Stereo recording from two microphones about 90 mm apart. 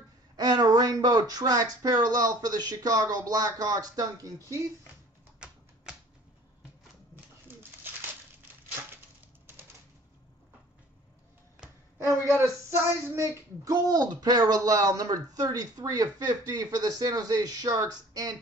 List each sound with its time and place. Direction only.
0.4 s speech: 50° right (ahead or behind)
12.4 s a sound: 30° right (ahead or behind)
13.7 s speech: 45° right (ahead or behind)